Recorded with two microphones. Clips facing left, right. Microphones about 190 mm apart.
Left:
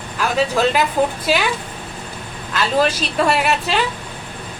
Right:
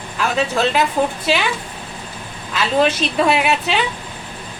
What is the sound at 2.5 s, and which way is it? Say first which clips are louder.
A woman's voice: right 1 dB; centre (ahead or behind).